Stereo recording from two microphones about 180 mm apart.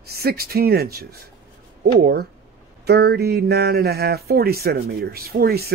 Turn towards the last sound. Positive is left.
turn(degrees=-60)  # may be behind; listen again after turning